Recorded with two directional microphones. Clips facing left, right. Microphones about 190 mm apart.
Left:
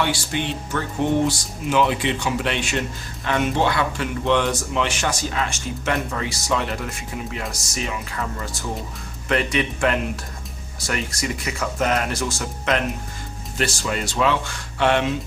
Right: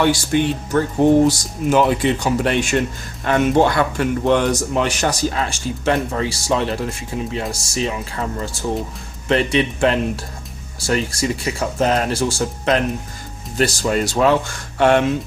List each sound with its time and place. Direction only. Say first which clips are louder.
0.0 s a man's voice: right 7 dB; 45° right (ahead or behind)